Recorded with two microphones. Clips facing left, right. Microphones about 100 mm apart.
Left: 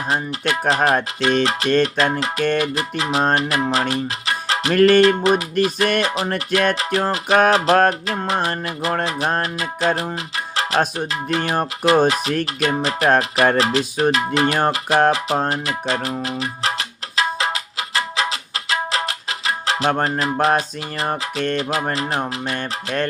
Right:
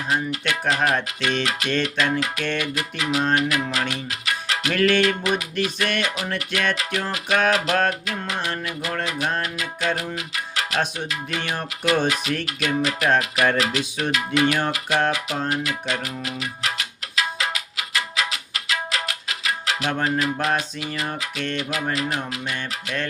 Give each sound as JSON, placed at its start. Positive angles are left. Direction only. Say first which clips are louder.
{"t": 0.1, "sound": "speech", "louder": "left 2 dB", "side_deg": 35}
{"t": 7.5, "sound": "music", "louder": "left 6 dB", "side_deg": 35}
{"t": 20.1, "sound": "speech", "louder": "left 4 dB", "side_deg": 35}